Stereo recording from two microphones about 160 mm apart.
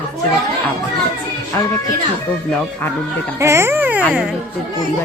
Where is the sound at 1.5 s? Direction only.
20° left (ahead or behind).